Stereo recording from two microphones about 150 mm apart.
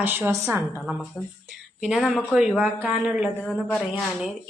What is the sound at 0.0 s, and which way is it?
A woman's voice, 15° right (ahead or behind).